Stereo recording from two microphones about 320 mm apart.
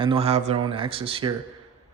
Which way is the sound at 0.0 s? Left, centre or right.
Centre.